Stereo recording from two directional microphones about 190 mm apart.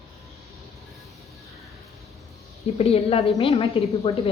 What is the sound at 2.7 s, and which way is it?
Dishes, 30° left (ahead or behind).